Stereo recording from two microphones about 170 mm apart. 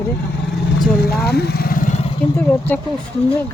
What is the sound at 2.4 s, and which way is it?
Speech, 10° left (ahead or behind).